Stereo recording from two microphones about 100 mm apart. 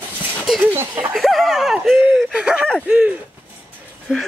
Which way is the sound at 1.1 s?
Centre (ahead or behind).